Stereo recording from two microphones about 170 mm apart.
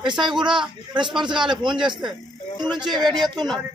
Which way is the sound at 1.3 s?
25° right (ahead or behind).